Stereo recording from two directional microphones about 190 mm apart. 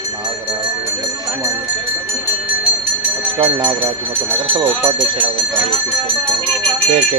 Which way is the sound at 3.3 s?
25° right (ahead or behind).